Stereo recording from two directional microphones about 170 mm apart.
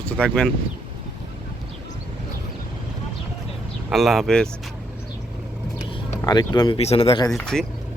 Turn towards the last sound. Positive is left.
turn(degrees=5)  # may be behind; listen again after turning